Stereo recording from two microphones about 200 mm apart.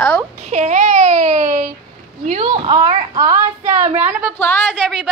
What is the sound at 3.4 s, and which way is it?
Speech, 35° right (ahead or behind).